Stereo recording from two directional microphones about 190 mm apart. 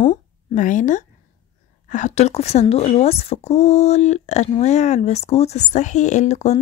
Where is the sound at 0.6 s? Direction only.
40° left (ahead or behind).